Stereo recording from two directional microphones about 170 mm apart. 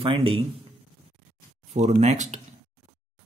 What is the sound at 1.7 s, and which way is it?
Speech, 40° right (ahead or behind).